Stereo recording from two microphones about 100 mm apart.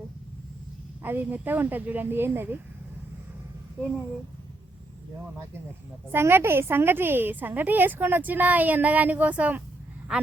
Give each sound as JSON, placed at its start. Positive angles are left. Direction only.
{"t": 1.0, "sound": "a woman's voice", "side_deg": -20}
{"t": 6.1, "sound": "a woman's voice", "side_deg": -25}